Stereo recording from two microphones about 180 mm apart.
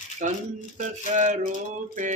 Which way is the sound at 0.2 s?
45° right (ahead or behind).